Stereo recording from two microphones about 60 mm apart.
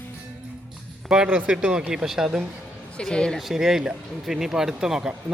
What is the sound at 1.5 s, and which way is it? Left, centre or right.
Speech, centre.